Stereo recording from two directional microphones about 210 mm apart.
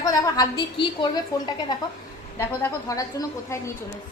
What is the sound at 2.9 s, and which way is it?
Speech, 15° left (ahead or behind).